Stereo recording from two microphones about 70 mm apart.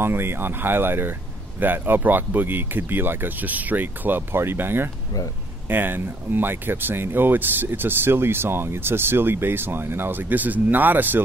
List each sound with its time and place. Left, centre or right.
0.0 s speech: right